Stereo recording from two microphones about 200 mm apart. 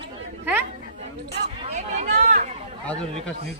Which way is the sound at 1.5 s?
35° right (ahead or behind).